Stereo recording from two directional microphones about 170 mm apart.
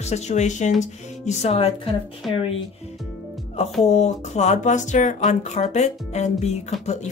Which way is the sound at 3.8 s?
40° left (ahead or behind).